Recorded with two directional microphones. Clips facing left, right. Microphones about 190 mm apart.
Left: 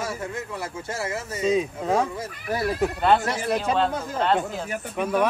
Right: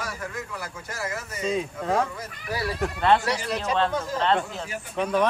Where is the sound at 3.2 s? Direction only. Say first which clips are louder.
Left 2 dB; 50° left (ahead or behind).